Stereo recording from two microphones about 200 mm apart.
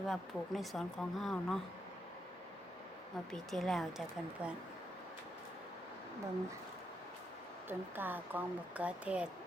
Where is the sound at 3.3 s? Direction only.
Centre (ahead or behind).